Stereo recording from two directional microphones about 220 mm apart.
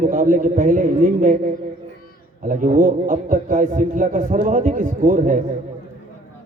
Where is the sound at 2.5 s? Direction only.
35° right (ahead or behind).